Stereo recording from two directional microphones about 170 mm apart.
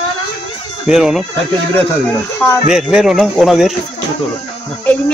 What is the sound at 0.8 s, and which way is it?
Speech, 5° right (ahead or behind).